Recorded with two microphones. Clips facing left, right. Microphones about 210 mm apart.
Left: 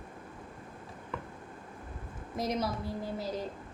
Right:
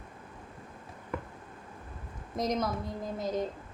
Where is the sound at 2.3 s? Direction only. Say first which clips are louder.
Right 2 dB; 5° left (ahead or behind).